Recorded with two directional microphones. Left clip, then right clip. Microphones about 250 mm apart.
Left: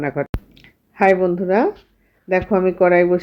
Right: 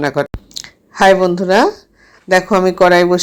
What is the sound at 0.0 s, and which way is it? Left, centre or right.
Speech, centre.